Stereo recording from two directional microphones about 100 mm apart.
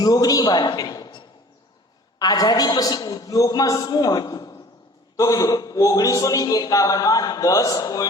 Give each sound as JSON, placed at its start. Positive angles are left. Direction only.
{"t": 0.0, "sound": "a man's voice", "side_deg": 40}